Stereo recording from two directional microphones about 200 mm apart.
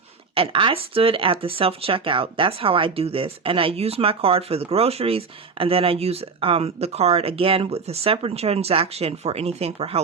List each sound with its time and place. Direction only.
0.3 s speech: 25° right (ahead or behind)